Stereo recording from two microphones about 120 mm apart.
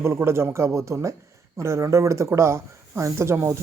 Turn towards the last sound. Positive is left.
turn(degrees=-25)  # may be behind; listen again after turning